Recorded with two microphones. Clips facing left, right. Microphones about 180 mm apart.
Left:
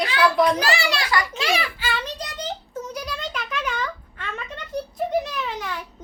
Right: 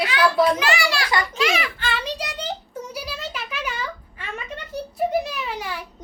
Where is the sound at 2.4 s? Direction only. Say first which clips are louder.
Even; 10° right (ahead or behind).